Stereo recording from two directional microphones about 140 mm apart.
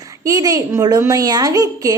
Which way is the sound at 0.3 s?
25° right (ahead or behind).